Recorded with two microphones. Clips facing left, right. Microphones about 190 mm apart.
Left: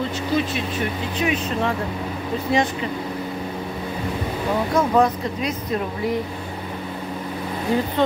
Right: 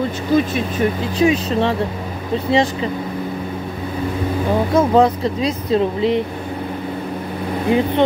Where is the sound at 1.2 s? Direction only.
30° right (ahead or behind).